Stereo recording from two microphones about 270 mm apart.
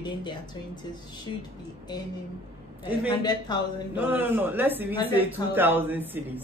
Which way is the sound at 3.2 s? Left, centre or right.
Centre.